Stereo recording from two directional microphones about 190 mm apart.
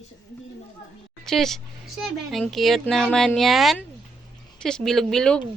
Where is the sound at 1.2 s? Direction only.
Centre (ahead or behind).